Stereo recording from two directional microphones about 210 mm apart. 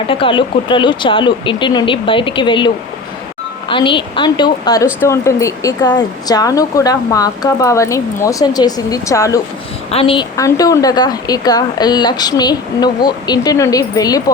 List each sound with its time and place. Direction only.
0.1 s speech: 25° left (ahead or behind)
9.9 s speech: 25° left (ahead or behind)
10.3 s speech: 15° left (ahead or behind)